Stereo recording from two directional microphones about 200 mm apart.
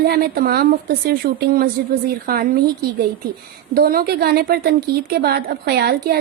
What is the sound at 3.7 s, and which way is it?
A woman's voice, 50° right (ahead or behind).